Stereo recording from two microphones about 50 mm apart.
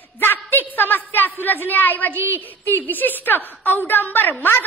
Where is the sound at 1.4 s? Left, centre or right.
Left.